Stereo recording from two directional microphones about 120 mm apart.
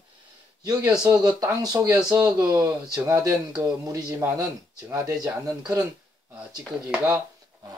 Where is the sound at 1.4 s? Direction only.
30° right (ahead or behind).